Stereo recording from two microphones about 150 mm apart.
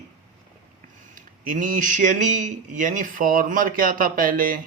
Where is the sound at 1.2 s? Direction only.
65° right (ahead or behind).